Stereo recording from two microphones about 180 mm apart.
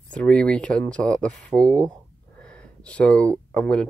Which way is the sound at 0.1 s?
5° left (ahead or behind).